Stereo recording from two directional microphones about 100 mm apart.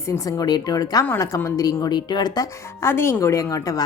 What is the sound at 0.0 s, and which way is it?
A woman's voice, 30° left (ahead or behind).